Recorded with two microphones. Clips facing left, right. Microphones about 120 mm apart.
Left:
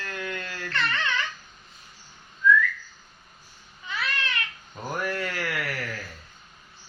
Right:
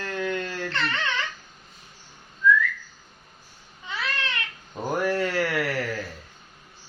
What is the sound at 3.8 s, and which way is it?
Babbling, 25° right (ahead or behind).